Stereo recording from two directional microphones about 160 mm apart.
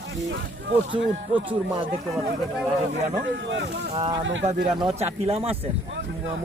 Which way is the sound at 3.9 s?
35° right (ahead or behind).